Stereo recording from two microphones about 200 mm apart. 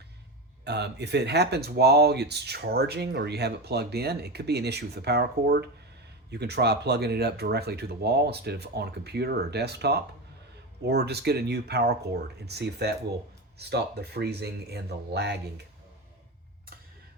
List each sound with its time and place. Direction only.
0.6 s speech: 55° right (ahead or behind)